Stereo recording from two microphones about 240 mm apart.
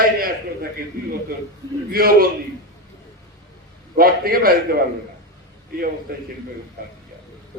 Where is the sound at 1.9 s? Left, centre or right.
Right.